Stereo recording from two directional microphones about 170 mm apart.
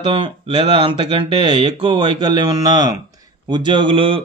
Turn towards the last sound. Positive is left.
turn(degrees=-30)  # may be behind; listen again after turning